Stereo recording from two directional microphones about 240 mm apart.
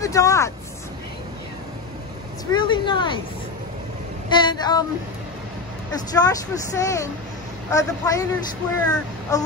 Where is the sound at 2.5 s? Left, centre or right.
Centre.